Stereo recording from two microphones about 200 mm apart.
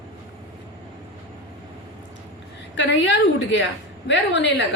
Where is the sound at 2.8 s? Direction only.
65° left (ahead or behind).